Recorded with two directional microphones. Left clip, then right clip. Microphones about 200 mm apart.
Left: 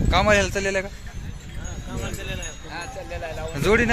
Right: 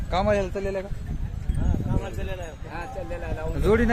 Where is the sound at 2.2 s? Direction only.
35° right (ahead or behind).